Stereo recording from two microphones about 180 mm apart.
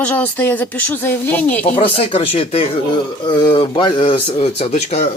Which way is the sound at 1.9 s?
35° left (ahead or behind).